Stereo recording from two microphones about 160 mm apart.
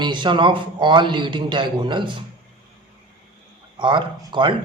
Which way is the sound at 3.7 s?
30° right (ahead or behind).